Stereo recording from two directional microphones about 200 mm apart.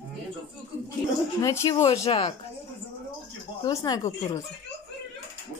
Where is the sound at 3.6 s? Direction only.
20° left (ahead or behind).